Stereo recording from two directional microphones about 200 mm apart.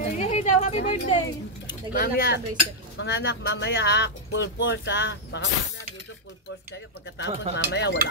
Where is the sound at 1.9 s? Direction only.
50° left (ahead or behind).